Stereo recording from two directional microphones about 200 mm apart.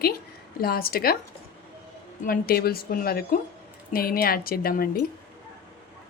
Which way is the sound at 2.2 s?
45° left (ahead or behind).